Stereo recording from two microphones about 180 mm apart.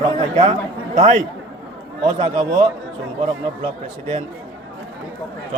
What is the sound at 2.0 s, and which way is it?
Speech, 25° right (ahead or behind).